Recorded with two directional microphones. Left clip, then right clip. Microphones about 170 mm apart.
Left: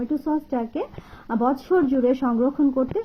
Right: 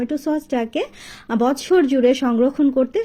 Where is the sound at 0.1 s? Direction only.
30° right (ahead or behind).